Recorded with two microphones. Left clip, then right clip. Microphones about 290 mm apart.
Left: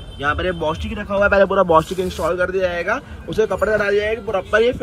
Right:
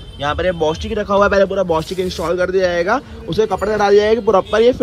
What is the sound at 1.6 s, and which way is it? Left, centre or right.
Speech, centre.